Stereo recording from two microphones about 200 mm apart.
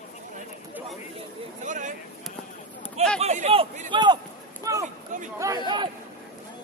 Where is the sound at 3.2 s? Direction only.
35° right (ahead or behind).